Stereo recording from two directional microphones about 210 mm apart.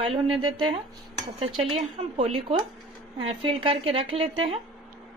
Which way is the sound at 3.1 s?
25° right (ahead or behind).